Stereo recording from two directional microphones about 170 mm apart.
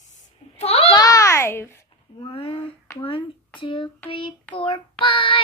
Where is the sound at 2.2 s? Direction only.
30° left (ahead or behind).